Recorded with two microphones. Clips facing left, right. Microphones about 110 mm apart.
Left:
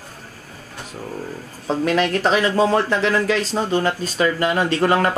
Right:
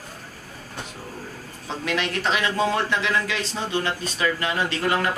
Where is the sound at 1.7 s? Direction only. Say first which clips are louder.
Left 8 dB; 40° left (ahead or behind).